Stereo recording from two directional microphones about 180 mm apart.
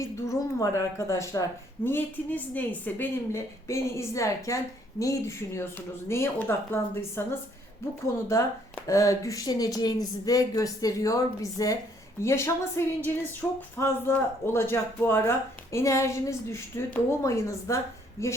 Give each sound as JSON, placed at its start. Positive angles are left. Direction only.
{"t": 0.0, "sound": "speech", "side_deg": 15}
{"t": 13.4, "sound": "a sound", "side_deg": 5}
{"t": 13.7, "sound": "speech", "side_deg": 15}